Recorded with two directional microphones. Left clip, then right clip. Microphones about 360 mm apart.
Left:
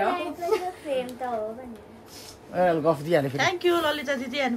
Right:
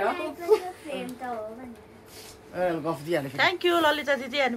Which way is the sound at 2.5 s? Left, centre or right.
Left.